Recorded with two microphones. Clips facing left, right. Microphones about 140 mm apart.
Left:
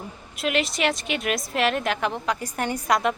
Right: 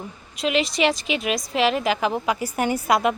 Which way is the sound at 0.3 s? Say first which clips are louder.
Right 3 dB; centre (ahead or behind).